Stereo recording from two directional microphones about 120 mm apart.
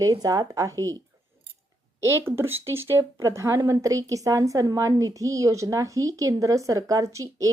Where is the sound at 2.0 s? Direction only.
20° right (ahead or behind).